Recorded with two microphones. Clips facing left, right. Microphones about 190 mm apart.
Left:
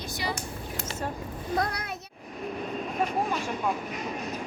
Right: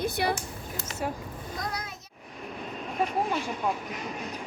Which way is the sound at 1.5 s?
65° left (ahead or behind).